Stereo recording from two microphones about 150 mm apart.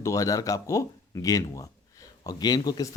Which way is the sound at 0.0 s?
20° left (ahead or behind).